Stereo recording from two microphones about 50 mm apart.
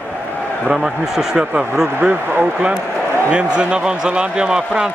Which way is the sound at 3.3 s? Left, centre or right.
Centre.